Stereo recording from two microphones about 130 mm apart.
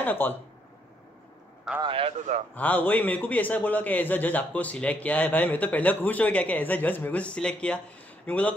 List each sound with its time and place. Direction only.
0.0 s speech: 15° left (ahead or behind)
1.8 s a man's voice: 45° right (ahead or behind)
2.5 s a man's voice: 15° left (ahead or behind)